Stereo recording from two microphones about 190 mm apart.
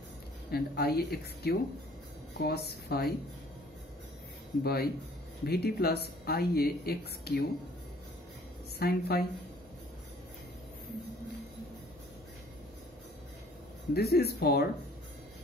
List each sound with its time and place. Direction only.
0.5 s speech: 55° left (ahead or behind)
4.6 s speech: 55° left (ahead or behind)
8.7 s speech: 55° left (ahead or behind)
13.9 s speech: 55° left (ahead or behind)